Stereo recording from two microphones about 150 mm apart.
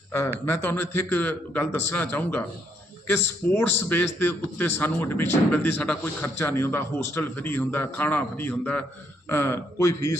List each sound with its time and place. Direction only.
0.4 s a man's voice: 15° left (ahead or behind)